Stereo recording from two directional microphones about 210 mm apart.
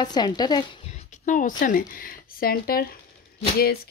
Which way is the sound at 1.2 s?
40° left (ahead or behind).